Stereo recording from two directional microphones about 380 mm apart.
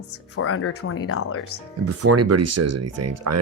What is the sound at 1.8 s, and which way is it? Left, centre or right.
Speech, right.